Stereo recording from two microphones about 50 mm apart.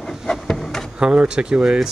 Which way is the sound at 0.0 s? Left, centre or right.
Centre.